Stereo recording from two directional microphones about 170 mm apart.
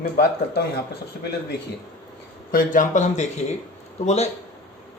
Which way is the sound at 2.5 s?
55° left (ahead or behind).